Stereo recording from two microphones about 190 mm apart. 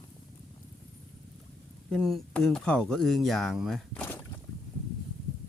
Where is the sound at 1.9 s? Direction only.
Centre (ahead or behind).